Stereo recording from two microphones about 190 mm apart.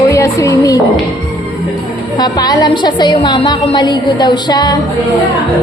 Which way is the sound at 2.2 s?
20° left (ahead or behind).